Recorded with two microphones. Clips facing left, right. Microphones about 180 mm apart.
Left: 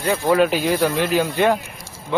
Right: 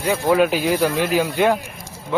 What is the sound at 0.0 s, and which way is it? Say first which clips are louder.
A man's voice: even; 10° right (ahead or behind).